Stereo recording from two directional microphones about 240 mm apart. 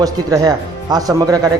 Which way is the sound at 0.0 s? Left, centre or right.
Centre.